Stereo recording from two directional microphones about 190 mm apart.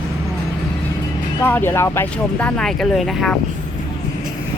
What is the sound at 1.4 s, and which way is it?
Speech, 10° left (ahead or behind).